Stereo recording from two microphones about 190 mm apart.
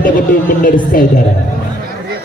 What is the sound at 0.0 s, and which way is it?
Speech, 50° left (ahead or behind).